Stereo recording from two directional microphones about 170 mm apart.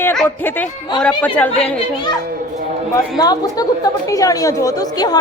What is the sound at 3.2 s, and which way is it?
A woman's voice, 20° left (ahead or behind).